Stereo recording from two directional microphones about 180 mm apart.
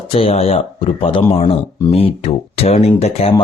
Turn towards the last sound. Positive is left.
turn(degrees=30)  # may be behind; listen again after turning